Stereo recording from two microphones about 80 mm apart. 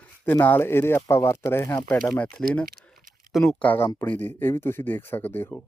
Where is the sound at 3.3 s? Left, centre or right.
Centre.